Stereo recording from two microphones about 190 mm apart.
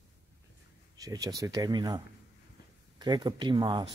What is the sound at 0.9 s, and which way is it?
Speech, 20° right (ahead or behind).